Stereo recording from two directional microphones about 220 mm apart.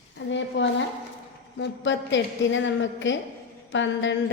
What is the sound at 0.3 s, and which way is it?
Speech, 55° left (ahead or behind).